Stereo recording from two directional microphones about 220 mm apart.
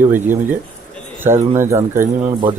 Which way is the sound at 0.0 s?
10° right (ahead or behind).